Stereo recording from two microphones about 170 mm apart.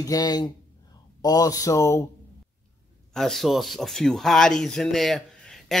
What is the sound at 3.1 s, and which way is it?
Speech, centre (ahead or behind).